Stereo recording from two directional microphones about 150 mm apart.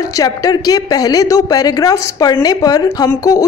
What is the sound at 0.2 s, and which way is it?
A woman's voice, 25° left (ahead or behind).